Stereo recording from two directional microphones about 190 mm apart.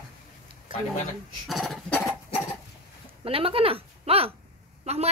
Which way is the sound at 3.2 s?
30° right (ahead or behind).